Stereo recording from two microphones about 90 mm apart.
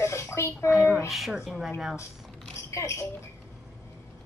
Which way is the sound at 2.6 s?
30° left (ahead or behind).